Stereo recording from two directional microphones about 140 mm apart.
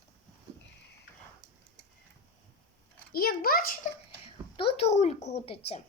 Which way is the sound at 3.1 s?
90° left.